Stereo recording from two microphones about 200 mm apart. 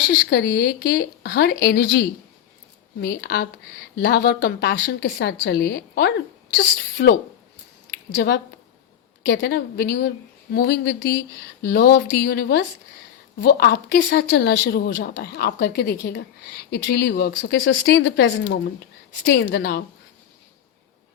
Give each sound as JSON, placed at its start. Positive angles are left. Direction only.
{"t": 0.1, "sound": "a woman's voice", "side_deg": 55}
{"t": 7.9, "sound": "a sound", "side_deg": 55}
{"t": 9.2, "sound": "a woman's voice", "side_deg": 60}